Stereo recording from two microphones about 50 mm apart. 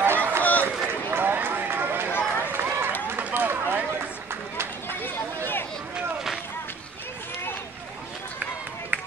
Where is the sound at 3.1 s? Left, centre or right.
Right.